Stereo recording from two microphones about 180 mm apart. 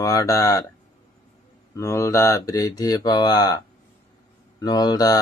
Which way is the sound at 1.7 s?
15° left (ahead or behind).